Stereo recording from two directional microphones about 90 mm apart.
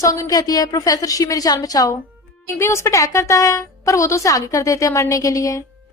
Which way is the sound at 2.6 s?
30° left (ahead or behind).